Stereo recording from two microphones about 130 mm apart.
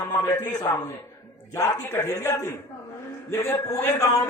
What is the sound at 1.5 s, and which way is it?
A man's voice, 20° left (ahead or behind).